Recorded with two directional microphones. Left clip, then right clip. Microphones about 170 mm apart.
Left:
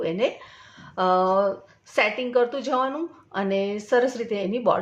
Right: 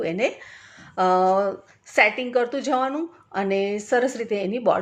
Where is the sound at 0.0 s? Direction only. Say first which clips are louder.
Even; 15° right (ahead or behind).